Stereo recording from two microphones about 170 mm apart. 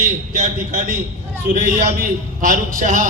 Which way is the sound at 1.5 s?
50° right (ahead or behind).